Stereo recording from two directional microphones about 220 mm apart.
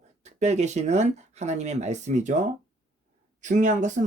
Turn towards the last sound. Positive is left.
turn(degrees=-35)  # may be behind; listen again after turning